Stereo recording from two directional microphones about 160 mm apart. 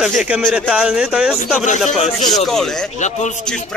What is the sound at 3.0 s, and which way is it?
Speech, 50° left (ahead or behind).